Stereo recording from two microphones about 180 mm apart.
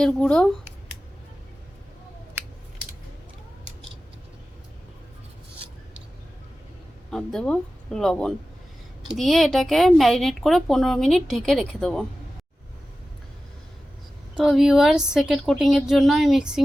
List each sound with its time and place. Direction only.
0.0 s speech: 5° left (ahead or behind)
7.1 s speech: centre (ahead or behind)
14.3 s speech: centre (ahead or behind)